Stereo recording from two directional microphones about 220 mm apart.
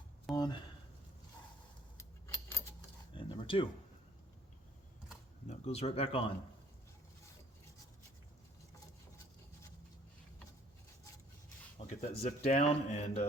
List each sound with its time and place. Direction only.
0.3 s speech: 20° left (ahead or behind)
2.0 s keys jangling: 15° left (ahead or behind)
3.1 s a sound: 25° left (ahead or behind)
5.5 s speech: 30° left (ahead or behind)
11.9 s speech: 30° left (ahead or behind)